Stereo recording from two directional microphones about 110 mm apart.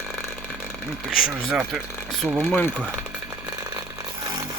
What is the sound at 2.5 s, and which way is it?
Speech, 15° left (ahead or behind).